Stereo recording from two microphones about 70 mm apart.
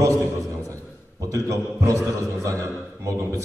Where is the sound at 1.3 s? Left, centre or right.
Right.